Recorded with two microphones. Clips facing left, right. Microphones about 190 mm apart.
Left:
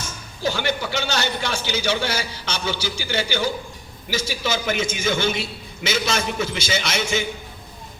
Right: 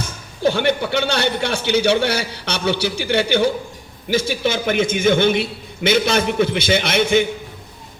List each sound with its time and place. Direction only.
0.4 s a man's voice: 60° right (ahead or behind)